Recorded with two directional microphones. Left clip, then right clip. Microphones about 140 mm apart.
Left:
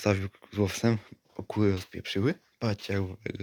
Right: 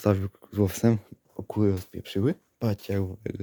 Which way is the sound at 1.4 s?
30° right (ahead or behind).